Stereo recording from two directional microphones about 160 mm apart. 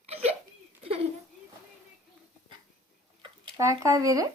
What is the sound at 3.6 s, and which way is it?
Speech, 20° right (ahead or behind).